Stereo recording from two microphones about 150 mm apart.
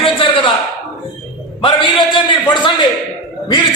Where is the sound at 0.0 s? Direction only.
35° left (ahead or behind).